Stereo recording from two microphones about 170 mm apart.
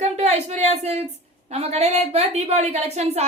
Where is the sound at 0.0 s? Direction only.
40° right (ahead or behind).